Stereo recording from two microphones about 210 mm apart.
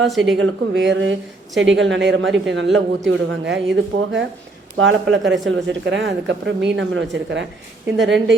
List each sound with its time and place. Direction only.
0.1 s a woman's voice: centre (ahead or behind)
0.3 s a woman's voice: 60° right (ahead or behind)